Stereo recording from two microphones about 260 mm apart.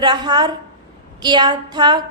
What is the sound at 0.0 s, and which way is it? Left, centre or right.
A woman's voice, centre.